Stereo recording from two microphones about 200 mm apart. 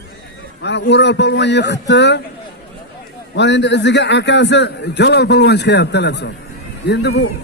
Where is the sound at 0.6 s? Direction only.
60° left (ahead or behind).